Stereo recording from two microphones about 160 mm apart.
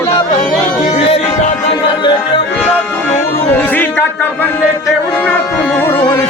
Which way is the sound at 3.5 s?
10° left (ahead or behind).